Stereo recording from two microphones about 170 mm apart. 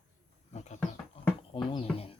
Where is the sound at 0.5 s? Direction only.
40° left (ahead or behind).